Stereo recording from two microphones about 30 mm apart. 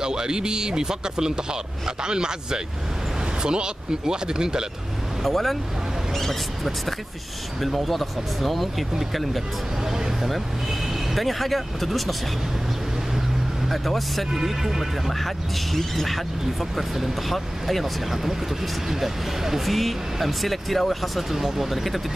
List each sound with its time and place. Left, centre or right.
0.0 s speech: right
5.2 s speech: centre
9.8 s a sound: centre
10.2 s speech: centre
13.7 s speech: centre
14.3 s speech: centre
15.1 s speech: centre